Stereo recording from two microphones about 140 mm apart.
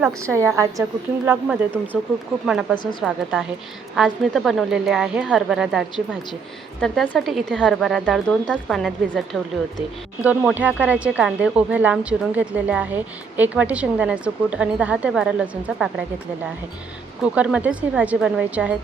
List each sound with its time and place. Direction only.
0.2 s a woman's voice: 20° right (ahead or behind)
2.5 s speech: 5° right (ahead or behind)
6.8 s speech: centre (ahead or behind)
10.2 s speech: 10° right (ahead or behind)
17.3 s speech: 10° right (ahead or behind)